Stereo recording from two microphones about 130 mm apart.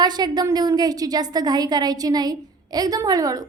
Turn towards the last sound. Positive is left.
turn(degrees=-25)  # may be behind; listen again after turning